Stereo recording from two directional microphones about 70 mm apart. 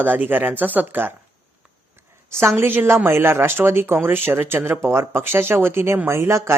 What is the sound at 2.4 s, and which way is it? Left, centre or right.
A woman's voice, right.